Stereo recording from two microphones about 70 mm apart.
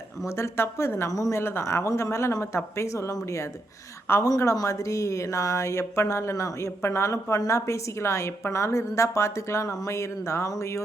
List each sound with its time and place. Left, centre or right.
0.3 s a woman's voice: left
1.1 s a woman's voice: left
1.4 s a woman's voice: left